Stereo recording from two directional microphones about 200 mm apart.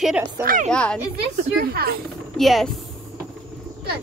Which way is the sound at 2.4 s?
Centre (ahead or behind).